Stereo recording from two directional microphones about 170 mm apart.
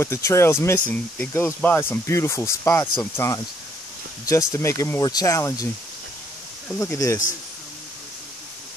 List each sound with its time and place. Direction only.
0.0 s speech: 15° left (ahead or behind)
6.8 s speech: 20° left (ahead or behind)